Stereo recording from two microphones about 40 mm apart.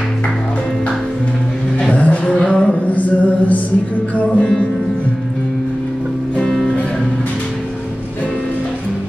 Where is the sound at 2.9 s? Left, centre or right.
Left.